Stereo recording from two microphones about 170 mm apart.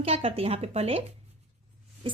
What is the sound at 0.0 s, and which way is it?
A woman's voice, 35° right (ahead or behind).